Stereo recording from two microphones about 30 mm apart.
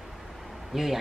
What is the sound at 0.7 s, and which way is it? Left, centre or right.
Speech, centre.